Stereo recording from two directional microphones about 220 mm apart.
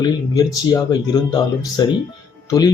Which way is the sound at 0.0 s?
20° left (ahead or behind).